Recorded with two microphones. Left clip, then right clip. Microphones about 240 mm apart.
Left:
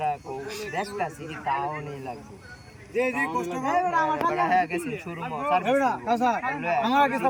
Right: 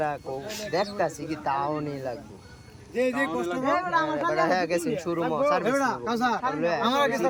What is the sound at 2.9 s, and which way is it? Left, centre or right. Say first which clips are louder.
A man's voice: even; centre.